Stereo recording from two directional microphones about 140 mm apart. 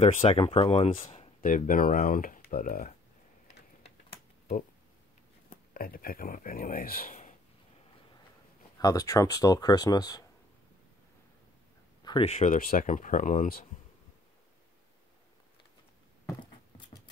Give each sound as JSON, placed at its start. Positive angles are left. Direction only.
{"t": 0.0, "sound": "speech", "side_deg": 45}
{"t": 1.4, "sound": "speech", "side_deg": 80}
{"t": 5.5, "sound": "speech", "side_deg": 90}
{"t": 8.7, "sound": "speech", "side_deg": 25}
{"t": 12.0, "sound": "a sound", "side_deg": 30}
{"t": 12.3, "sound": "speech", "side_deg": 55}
{"t": 12.5, "sound": "speech", "side_deg": 80}